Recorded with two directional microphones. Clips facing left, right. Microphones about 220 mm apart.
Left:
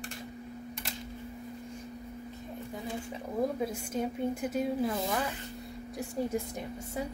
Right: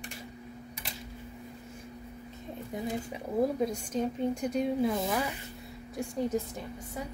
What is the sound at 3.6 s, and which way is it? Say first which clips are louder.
Speech: right 2 dB; 5° left (ahead or behind).